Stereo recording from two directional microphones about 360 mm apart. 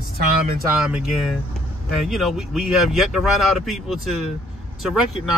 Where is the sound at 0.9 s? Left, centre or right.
Centre.